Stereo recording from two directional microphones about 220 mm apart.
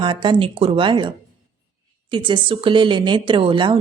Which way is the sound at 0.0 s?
20° right (ahead or behind).